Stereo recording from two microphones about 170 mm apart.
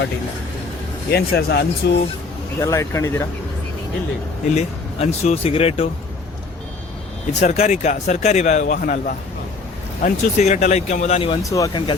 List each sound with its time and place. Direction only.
1.1 s speech: 65° left (ahead or behind)
2.6 s speech: 15° left (ahead or behind)
4.5 s speech: 40° left (ahead or behind)
7.4 s a man's voice: 45° left (ahead or behind)
11.4 s speech: 20° left (ahead or behind)